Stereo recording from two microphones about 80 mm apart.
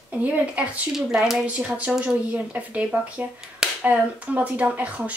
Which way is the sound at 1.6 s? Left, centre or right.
Centre.